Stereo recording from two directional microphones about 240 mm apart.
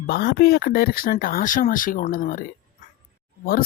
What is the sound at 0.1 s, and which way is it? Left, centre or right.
Speech, left.